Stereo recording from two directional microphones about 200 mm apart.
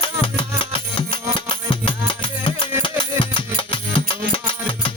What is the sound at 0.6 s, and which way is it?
Music, 25° left (ahead or behind).